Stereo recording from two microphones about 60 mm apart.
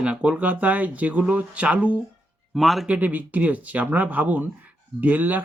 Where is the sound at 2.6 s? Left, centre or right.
Centre.